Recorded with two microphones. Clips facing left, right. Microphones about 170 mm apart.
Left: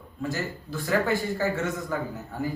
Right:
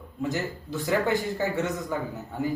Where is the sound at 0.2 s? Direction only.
20° right (ahead or behind).